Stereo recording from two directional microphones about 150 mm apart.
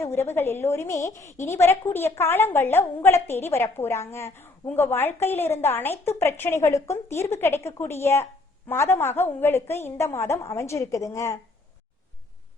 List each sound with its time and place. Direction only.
0.0 s a woman's voice: 15° left (ahead or behind)